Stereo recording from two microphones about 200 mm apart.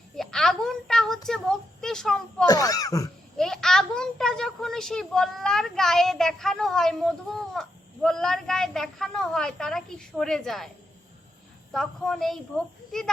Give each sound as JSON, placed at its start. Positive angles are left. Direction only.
{"t": 0.2, "sound": "a sound", "side_deg": 0}
{"t": 1.3, "sound": "speech", "side_deg": 5}
{"t": 2.5, "sound": "speech", "side_deg": 20}
{"t": 3.3, "sound": "speech", "side_deg": 5}
{"t": 11.7, "sound": "speech", "side_deg": 0}